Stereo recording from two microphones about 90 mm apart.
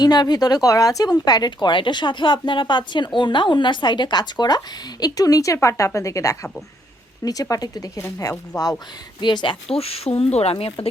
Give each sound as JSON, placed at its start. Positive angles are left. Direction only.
{"t": 0.0, "sound": "a woman's voice", "side_deg": 50}
{"t": 1.6, "sound": "a woman's voice", "side_deg": 60}
{"t": 9.2, "sound": "speech", "side_deg": 60}
{"t": 9.7, "sound": "speech", "side_deg": 90}